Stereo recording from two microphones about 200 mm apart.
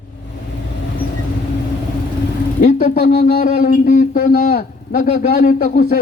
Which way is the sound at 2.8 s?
45° left (ahead or behind).